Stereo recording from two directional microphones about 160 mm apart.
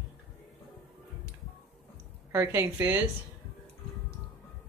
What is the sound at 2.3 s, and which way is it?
Speech, 15° right (ahead or behind).